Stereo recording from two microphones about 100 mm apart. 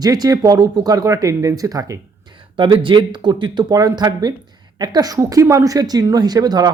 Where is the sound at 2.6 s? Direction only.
55° right (ahead or behind).